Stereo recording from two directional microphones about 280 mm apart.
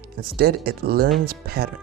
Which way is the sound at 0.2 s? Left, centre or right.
Right.